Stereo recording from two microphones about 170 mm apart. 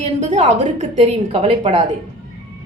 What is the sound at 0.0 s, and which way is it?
A woman's voice, 40° right (ahead or behind).